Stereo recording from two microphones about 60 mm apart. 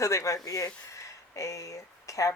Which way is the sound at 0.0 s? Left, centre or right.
Left.